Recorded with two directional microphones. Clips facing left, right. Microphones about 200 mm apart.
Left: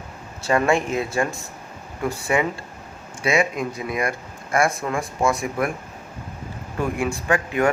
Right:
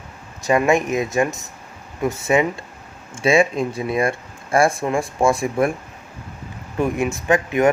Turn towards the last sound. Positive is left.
turn(degrees=-20)  # may be behind; listen again after turning